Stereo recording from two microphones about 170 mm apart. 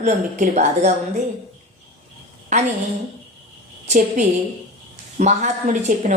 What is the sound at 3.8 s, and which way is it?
A woman's voice, 45° right (ahead or behind).